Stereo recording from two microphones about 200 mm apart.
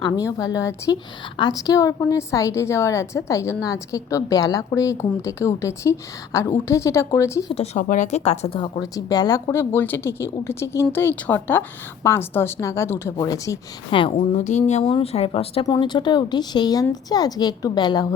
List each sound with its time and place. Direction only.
0.2 s a woman's voice: 20° left (ahead or behind)
7.5 s a woman's voice: 30° left (ahead or behind)
14.2 s a woman's voice: 35° left (ahead or behind); by 18.1 s 20° left (ahead or behind)